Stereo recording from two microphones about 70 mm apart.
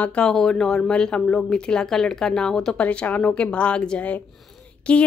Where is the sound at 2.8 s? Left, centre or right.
Left.